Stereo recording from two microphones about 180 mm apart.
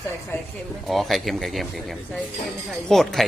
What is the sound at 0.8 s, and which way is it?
Speech, centre (ahead or behind).